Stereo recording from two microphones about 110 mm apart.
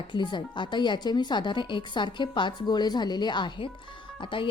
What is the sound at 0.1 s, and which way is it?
A woman's voice, 45° left (ahead or behind).